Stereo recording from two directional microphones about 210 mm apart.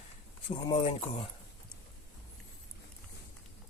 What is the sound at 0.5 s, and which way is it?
Speech, 25° left (ahead or behind).